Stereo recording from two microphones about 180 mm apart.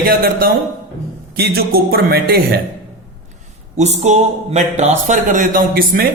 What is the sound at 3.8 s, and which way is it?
A man's voice, 40° right (ahead or behind).